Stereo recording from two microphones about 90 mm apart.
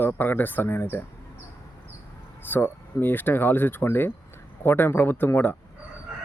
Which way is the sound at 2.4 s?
25° left (ahead or behind).